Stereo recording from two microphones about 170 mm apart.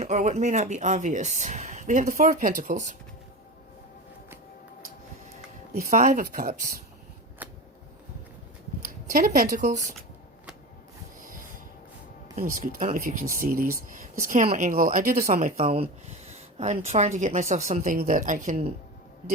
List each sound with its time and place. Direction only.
0.0 s speech: 40° right (ahead or behind)
5.7 s speech: 50° right (ahead or behind)
9.0 s speech: 55° right (ahead or behind)
12.5 s speech: 55° right (ahead or behind)
15.7 s speech: 40° right (ahead or behind)